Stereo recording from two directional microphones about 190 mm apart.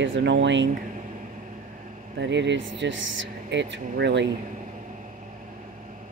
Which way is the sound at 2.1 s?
65° right (ahead or behind).